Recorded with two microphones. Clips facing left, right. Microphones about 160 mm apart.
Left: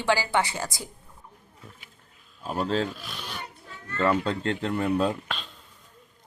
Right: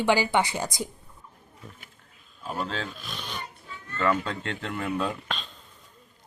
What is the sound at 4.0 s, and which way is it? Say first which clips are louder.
Speech: left 2 dB; 35° left (ahead or behind).